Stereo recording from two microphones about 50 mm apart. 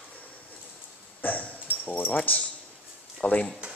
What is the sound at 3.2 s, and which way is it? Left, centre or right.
Speech, left.